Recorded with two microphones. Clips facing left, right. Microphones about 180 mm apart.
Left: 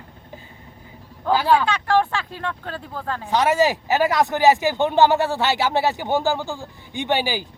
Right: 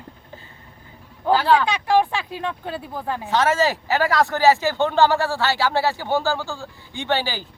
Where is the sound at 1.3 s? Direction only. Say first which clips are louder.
Even; 15° left (ahead or behind).